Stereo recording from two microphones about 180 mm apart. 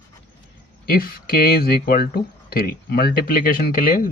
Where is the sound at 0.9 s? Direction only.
55° left (ahead or behind).